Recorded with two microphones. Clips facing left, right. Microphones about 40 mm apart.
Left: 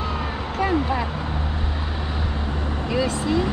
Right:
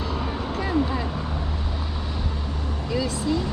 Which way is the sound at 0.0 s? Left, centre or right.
Left.